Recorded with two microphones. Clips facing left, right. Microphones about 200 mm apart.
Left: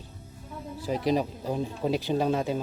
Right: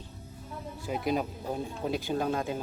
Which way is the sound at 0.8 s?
35° left (ahead or behind).